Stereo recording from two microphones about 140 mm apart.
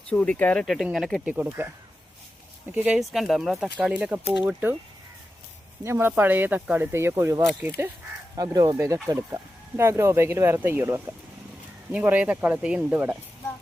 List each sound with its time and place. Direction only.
0.1 s speech: 10° left (ahead or behind)
2.7 s speech: 10° right (ahead or behind)
5.8 s speech: 15° right (ahead or behind)